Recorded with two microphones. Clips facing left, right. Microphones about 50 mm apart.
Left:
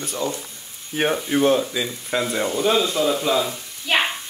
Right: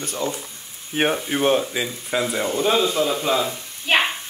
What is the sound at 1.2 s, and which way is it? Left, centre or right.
Speech, right.